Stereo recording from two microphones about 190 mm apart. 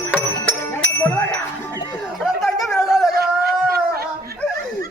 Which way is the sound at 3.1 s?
55° right (ahead or behind).